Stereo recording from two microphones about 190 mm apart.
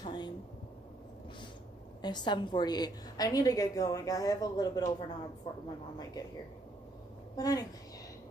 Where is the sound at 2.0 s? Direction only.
25° left (ahead or behind).